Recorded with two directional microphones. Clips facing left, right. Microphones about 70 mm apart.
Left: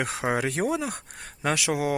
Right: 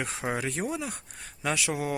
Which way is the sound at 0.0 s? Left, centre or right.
Left.